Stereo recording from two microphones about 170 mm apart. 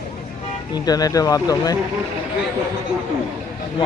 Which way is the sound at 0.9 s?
20° left (ahead or behind).